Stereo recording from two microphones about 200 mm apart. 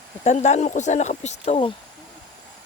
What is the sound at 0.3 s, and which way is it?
Speech, 35° left (ahead or behind).